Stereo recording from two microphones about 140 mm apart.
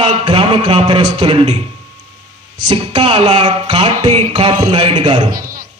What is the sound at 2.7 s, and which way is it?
A man's voice, 35° right (ahead or behind).